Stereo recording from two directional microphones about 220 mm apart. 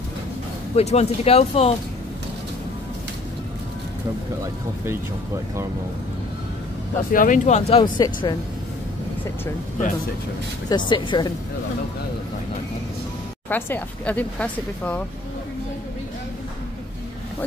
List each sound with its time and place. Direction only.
0.7 s speech: 30° left (ahead or behind)
7.1 s speech: 40° left (ahead or behind); by 8.4 s 20° left (ahead or behind)
10.7 s speech: 20° left (ahead or behind)
13.5 s speech: 10° left (ahead or behind)